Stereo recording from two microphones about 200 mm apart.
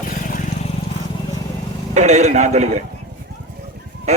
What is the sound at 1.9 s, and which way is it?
Speech, 35° right (ahead or behind).